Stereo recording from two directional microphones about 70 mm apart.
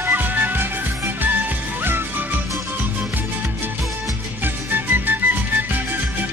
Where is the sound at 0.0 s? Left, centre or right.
Right.